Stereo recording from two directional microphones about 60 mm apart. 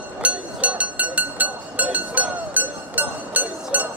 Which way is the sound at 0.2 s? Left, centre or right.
Right.